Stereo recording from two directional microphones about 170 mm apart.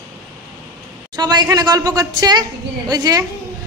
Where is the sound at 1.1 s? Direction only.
25° right (ahead or behind).